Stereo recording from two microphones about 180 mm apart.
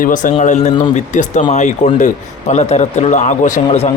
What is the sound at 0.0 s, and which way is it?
A man's voice, 45° left (ahead or behind).